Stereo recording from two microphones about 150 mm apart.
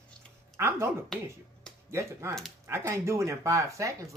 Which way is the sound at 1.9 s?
20° right (ahead or behind).